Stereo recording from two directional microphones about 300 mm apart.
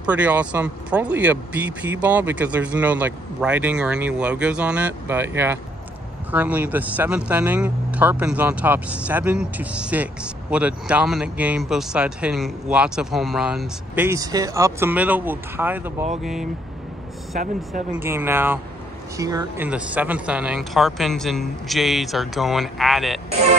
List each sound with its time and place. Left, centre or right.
0.0 s speech: centre
17.3 s speech: right
17.9 s speech: centre